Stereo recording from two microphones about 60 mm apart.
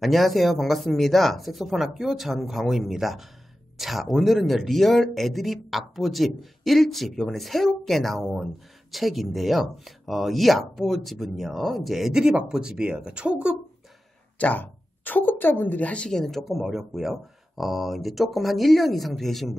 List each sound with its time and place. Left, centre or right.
0.0 s speech: centre
14.4 s speech: left
16.1 s speech: centre